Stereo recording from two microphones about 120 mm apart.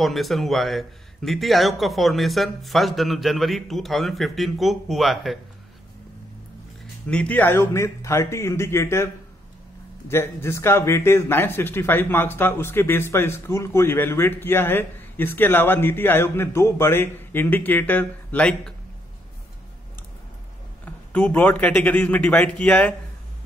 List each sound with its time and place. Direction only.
0.0 s speech: centre (ahead or behind)
7.1 s a man's voice: 10° left (ahead or behind)
20.8 s a man's voice: 10° left (ahead or behind)